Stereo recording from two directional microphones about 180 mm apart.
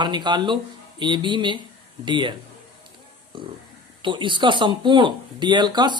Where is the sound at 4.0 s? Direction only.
25° right (ahead or behind).